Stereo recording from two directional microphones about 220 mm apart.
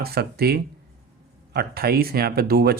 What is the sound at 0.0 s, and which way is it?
Speech, 45° right (ahead or behind).